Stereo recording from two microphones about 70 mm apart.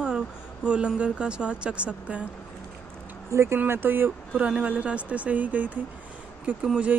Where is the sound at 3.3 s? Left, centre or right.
Right; by 6.9 s centre.